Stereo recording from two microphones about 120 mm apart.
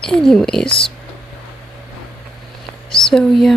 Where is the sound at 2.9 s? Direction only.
5° left (ahead or behind).